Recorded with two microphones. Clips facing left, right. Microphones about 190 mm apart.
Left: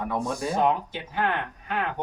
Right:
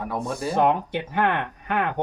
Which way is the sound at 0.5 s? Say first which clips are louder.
Right 4 dB; 60° right (ahead or behind).